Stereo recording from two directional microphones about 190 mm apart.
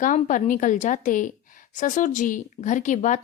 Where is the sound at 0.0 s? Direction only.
45° left (ahead or behind).